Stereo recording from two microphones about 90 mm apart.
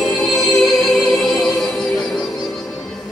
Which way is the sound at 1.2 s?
5° left (ahead or behind).